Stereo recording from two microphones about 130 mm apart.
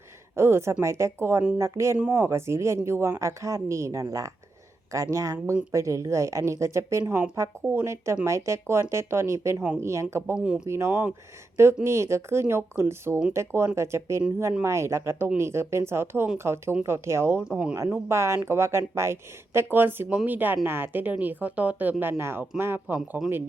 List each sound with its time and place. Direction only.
0.3 s speech: 20° right (ahead or behind)
10.3 s speech: 10° right (ahead or behind)
10.7 s speech: 20° right (ahead or behind)
18.1 s speech: 20° right (ahead or behind)